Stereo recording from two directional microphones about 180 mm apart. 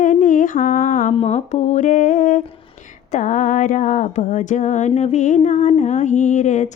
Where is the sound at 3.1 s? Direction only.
45° left (ahead or behind).